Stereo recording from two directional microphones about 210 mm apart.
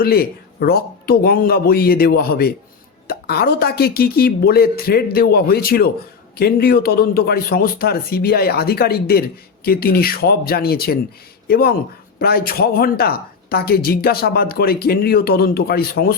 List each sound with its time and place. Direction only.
0.0 s a man's voice: 45° left (ahead or behind)